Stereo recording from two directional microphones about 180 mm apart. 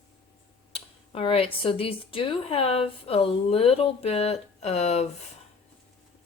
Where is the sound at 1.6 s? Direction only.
30° left (ahead or behind).